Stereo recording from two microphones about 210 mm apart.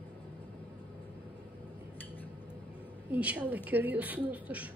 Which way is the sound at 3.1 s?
5° right (ahead or behind).